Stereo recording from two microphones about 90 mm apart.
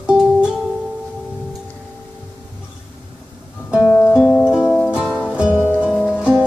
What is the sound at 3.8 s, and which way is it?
Music, 25° left (ahead or behind).